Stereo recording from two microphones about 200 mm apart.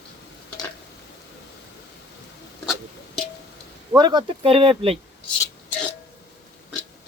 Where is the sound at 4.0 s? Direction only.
20° right (ahead or behind).